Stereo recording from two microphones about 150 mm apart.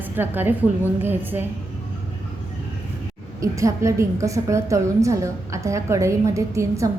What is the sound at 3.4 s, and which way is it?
A woman's voice, 20° right (ahead or behind).